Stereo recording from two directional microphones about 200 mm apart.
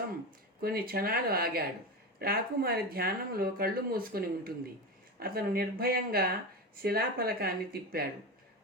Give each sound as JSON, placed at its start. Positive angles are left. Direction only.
{"t": 0.6, "sound": "speech", "side_deg": -50}